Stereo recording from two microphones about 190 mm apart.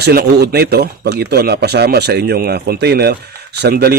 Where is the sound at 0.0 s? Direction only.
55° right (ahead or behind).